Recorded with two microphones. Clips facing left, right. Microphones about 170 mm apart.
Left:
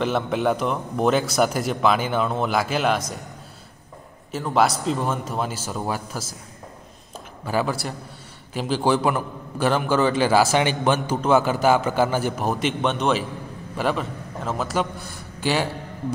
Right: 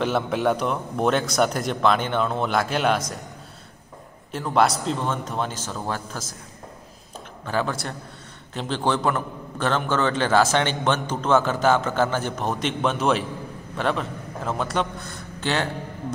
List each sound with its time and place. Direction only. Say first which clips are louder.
0.0 s a man's voice: even; centre (ahead or behind)
4.3 s a man's voice: even; centre (ahead or behind)
5.7 s a man's voice: left 2 dB; 15° left (ahead or behind)
7.4 s a man's voice: left 2 dB; 5° left (ahead or behind)